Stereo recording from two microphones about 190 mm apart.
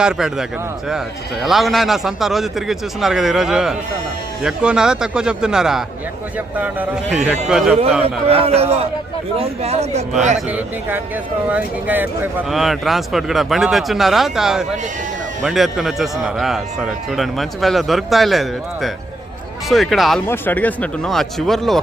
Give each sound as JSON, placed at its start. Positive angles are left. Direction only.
{"t": 0.0, "sound": "a man's voice", "side_deg": 0}
{"t": 8.0, "sound": "a man's voice", "side_deg": -30}
{"t": 10.5, "sound": "a man's voice", "side_deg": -10}